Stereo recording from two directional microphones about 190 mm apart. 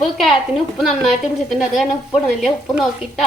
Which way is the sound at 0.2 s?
Centre (ahead or behind).